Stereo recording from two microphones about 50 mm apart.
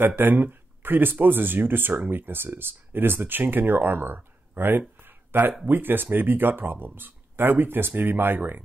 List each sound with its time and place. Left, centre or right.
0.0 s speech: right